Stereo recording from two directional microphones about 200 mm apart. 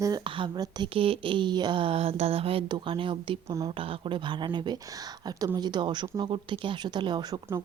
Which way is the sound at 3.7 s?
25° right (ahead or behind).